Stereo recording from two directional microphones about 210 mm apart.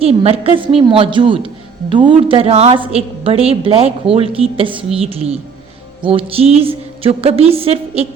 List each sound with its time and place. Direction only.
0.0 s a woman's voice: 30° right (ahead or behind)